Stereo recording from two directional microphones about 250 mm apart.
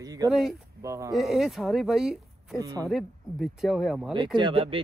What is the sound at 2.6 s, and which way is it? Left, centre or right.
Speech, centre.